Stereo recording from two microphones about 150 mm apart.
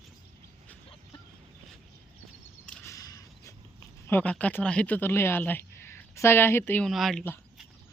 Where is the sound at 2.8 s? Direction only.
20° left (ahead or behind).